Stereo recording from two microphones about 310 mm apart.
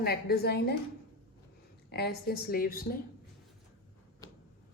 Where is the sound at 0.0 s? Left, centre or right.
Left.